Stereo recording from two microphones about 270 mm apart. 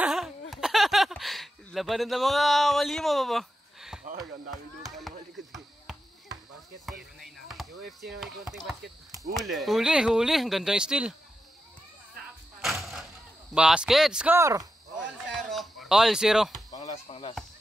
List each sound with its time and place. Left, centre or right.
0.0 s a sound: centre
4.5 s speech: centre
6.9 s speech: centre
13.6 s speech: centre
15.3 s a sound: centre
16.8 s speech: left